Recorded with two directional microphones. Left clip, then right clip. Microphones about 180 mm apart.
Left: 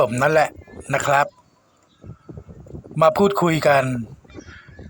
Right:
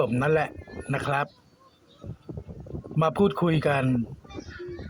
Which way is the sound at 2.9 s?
45° left (ahead or behind).